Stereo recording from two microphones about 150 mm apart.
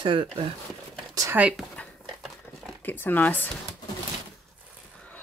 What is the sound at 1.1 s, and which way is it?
Speech, 20° right (ahead or behind).